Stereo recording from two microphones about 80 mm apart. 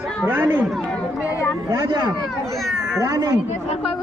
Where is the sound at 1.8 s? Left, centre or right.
Right.